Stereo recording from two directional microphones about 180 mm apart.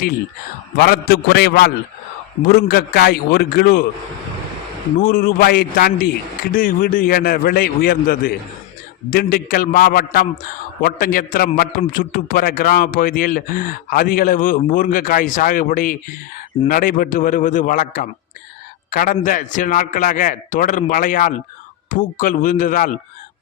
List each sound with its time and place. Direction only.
0.8 s a man's voice: 60° left (ahead or behind)
4.9 s a man's voice: 55° left (ahead or behind)